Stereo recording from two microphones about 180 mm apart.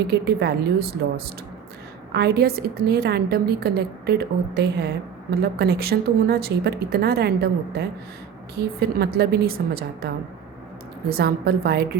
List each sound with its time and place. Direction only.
0.1 s a woman's voice: 65° right (ahead or behind)
9.0 s a woman's voice: 60° right (ahead or behind)
11.1 s a woman's voice: 60° right (ahead or behind)